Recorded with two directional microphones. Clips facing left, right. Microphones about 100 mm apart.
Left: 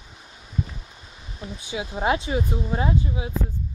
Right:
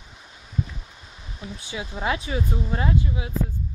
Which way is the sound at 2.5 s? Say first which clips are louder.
Left 1 dB; 15° left (ahead or behind).